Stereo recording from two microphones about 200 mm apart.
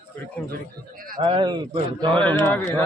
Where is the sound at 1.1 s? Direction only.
20° right (ahead or behind).